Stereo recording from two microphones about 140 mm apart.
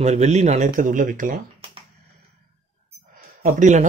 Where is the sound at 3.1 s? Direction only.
60° right (ahead or behind).